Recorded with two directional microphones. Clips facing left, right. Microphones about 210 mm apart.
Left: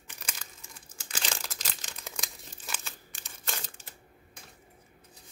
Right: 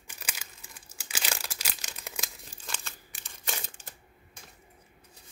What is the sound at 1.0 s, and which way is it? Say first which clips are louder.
Crumpling: even; 10° right (ahead or behind).